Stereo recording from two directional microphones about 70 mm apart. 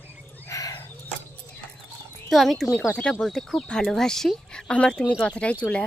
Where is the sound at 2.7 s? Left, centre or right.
Centre.